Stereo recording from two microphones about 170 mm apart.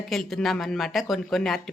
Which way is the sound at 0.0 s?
Centre (ahead or behind).